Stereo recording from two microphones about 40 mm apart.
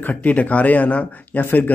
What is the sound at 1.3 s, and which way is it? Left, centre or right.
Speech, left.